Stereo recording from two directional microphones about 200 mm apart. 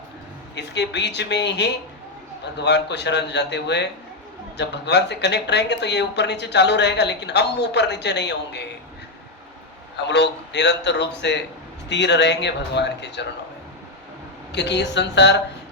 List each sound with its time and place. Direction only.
0.5 s speech: 60° left (ahead or behind)
10.1 s speech: 60° left (ahead or behind)
14.5 s speech: 60° left (ahead or behind)